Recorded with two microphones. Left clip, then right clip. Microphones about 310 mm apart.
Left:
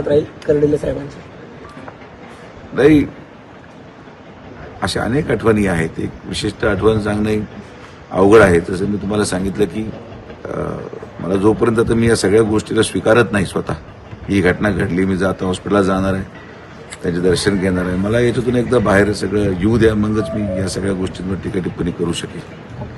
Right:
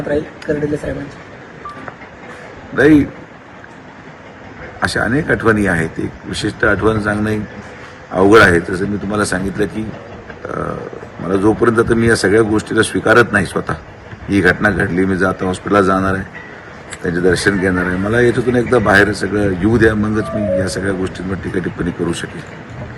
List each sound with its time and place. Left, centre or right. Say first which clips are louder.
0.9 s speech: left 2 dB; left
2.7 s speech: right 1 dB; centre
4.8 s speech: right 3 dB; centre